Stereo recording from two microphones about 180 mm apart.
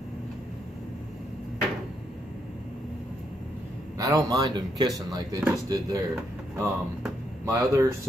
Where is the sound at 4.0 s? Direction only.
20° right (ahead or behind).